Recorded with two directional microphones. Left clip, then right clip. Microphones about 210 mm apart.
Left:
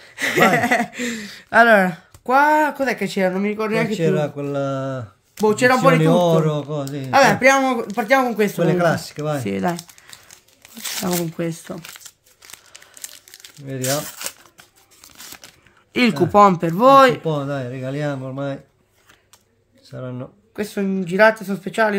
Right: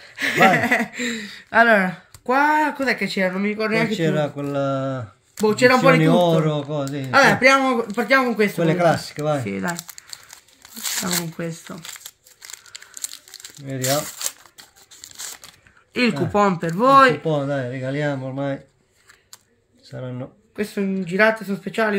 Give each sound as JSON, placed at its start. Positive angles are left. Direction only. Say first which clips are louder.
{"t": 0.0, "sound": "speech", "louder": "even", "side_deg": 60}
{"t": 3.9, "sound": "speech", "louder": "left 2 dB", "side_deg": 10}
{"t": 5.5, "sound": "speech", "louder": "even", "side_deg": 60}
{"t": 5.9, "sound": "speech", "louder": "left 1 dB", "side_deg": 10}
{"t": 7.1, "sound": "speech", "louder": "left 1 dB", "side_deg": 55}
{"t": 8.5, "sound": "speech", "louder": "even", "side_deg": 5}
{"t": 9.4, "sound": "speech", "louder": "left 4 dB", "side_deg": 55}
{"t": 11.1, "sound": "speech", "louder": "left 3 dB", "side_deg": 55}
{"t": 13.7, "sound": "speech", "louder": "right 1 dB", "side_deg": 5}
{"t": 15.9, "sound": "speech", "louder": "left 4 dB", "side_deg": 60}
{"t": 17.2, "sound": "speech", "louder": "right 1 dB", "side_deg": 5}
{"t": 19.9, "sound": "speech", "louder": "left 1 dB", "side_deg": 5}
{"t": 20.5, "sound": "speech", "louder": "left 1 dB", "side_deg": 60}